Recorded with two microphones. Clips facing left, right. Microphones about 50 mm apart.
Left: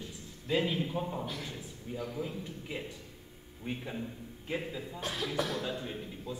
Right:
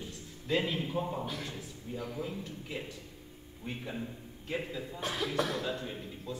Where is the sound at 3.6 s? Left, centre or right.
Centre.